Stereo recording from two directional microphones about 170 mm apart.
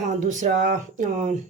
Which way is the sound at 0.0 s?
50° right (ahead or behind).